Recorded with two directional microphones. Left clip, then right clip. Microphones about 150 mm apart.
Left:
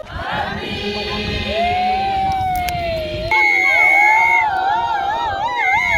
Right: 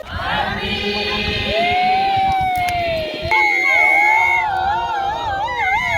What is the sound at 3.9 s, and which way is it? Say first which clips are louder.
Crowd: left 1 dB; centre (ahead or behind).